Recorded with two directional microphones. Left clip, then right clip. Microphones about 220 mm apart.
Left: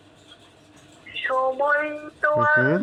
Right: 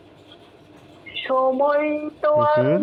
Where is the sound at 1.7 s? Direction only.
50° left (ahead or behind).